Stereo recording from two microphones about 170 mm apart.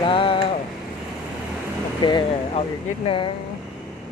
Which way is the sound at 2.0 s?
25° left (ahead or behind).